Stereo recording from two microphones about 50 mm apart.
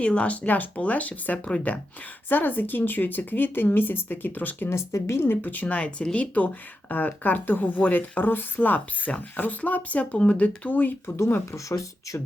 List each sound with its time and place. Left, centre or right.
0.0 s speech: left
4.7 s speech: left
5.4 s speech: left
5.6 s speech: left
11.5 s speech: left